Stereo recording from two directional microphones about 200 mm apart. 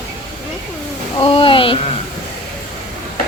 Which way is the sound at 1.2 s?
25° left (ahead or behind).